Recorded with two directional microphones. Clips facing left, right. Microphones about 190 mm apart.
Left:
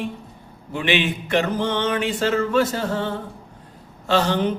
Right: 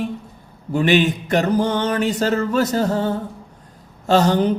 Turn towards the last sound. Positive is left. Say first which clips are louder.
# right 4 dB
turn(degrees=-40)  # may be behind; listen again after turning